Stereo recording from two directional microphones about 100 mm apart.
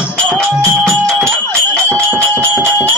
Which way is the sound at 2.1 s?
30° right (ahead or behind).